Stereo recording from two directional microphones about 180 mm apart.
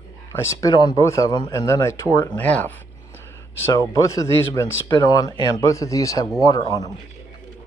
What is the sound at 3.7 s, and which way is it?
Speech, 20° left (ahead or behind).